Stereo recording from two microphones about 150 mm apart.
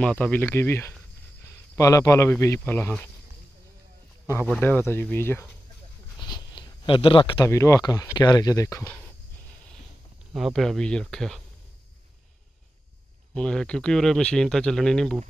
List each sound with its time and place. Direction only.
0.0 s speech: 10° left (ahead or behind)
4.5 s speech: 10° left (ahead or behind)
6.1 s a sound: 30° left (ahead or behind)
7.4 s speech: 20° left (ahead or behind)
10.3 s speech: centre (ahead or behind)
13.3 s speech: 5° left (ahead or behind)